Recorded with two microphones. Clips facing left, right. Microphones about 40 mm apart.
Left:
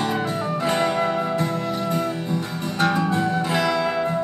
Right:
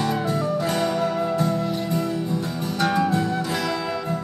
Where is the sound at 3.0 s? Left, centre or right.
Left.